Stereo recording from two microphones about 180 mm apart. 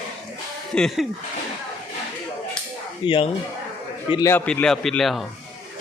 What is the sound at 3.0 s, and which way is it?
A man's voice, 25° left (ahead or behind).